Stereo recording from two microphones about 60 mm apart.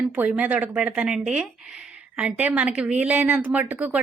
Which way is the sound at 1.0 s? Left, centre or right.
Centre.